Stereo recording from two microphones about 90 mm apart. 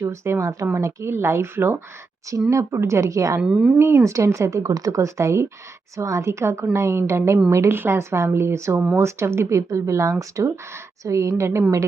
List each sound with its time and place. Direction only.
0.0 s speech: 30° right (ahead or behind)
3.4 s speech: 15° right (ahead or behind)
3.8 s speech: 25° right (ahead or behind)